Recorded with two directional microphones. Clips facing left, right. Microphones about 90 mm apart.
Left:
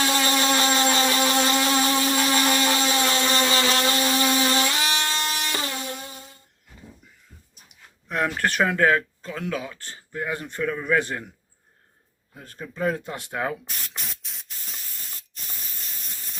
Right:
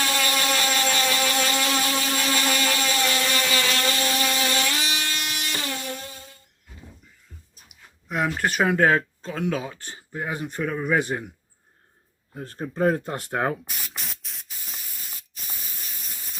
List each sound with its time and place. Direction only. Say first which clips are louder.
0.0 s vehicle: left 3 dB; 25° left (ahead or behind)
5.7 s music: even; 20° left (ahead or behind)
7.7 s a sound: even; 5° right (ahead or behind)
8.6 s speech: right 1 dB; 25° right (ahead or behind)
12.3 s speech: right 6 dB; 35° right (ahead or behind)
13.7 s spray: even; centre (ahead or behind)